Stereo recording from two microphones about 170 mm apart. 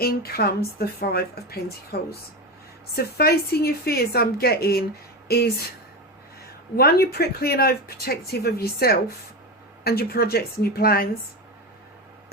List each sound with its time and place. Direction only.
0.0 s speech: 65° left (ahead or behind)
6.7 s speech: 65° left (ahead or behind)